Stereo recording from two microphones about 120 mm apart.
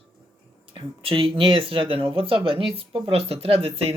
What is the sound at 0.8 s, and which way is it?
Speech, 45° right (ahead or behind).